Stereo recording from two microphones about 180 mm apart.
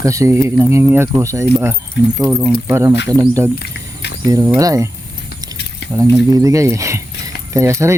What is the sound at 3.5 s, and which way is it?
Rodents, 70° left (ahead or behind).